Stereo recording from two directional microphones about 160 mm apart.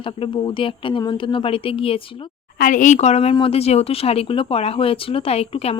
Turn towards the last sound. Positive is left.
turn(degrees=40)  # may be behind; listen again after turning